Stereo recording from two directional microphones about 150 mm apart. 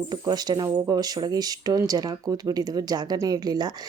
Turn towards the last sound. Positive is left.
turn(degrees=-25)  # may be behind; listen again after turning